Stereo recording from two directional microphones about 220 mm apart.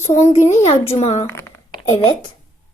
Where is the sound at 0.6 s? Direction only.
30° left (ahead or behind).